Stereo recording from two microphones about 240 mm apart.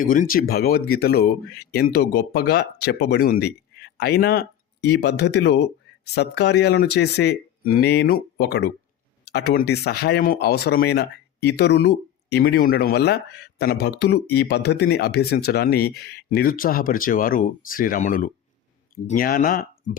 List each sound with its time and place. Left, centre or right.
0.0 s speech: left